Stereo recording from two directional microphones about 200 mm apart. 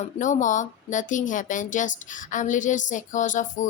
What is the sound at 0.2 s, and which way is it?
Speech, 40° left (ahead or behind).